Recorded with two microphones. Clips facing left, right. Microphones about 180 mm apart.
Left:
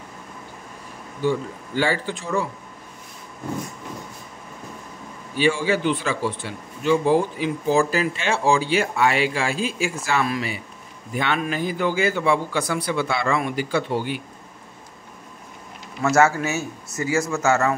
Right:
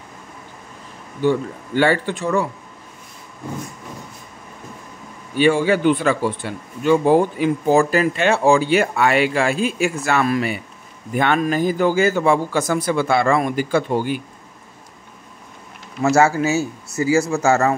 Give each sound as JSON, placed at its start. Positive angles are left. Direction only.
{"t": 1.2, "sound": "speech", "side_deg": -60}
{"t": 5.4, "sound": "a man's voice", "side_deg": -55}
{"t": 16.0, "sound": "a man's voice", "side_deg": -30}